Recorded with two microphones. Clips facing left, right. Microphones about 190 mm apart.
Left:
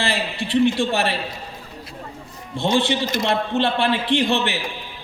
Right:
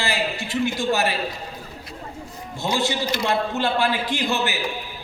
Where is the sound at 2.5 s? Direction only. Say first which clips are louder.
Left 4 dB; 30° left (ahead or behind).